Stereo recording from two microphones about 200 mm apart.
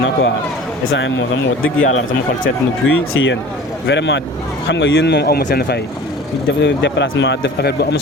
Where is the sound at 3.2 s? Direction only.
70° left (ahead or behind).